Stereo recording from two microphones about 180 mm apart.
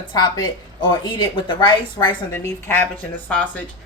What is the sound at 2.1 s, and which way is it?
A woman's voice, 15° left (ahead or behind).